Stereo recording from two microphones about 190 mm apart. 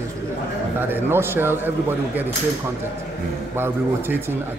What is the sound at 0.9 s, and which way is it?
A man's voice, 10° right (ahead or behind).